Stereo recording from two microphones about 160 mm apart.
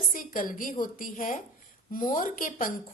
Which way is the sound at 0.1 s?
60° left (ahead or behind).